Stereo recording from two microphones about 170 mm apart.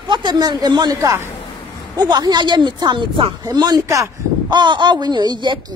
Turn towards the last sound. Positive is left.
turn(degrees=-25)  # may be behind; listen again after turning